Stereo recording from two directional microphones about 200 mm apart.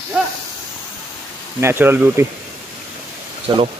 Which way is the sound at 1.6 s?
10° right (ahead or behind).